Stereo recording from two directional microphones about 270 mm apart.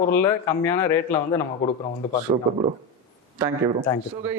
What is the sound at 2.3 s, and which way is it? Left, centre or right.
Speech, right.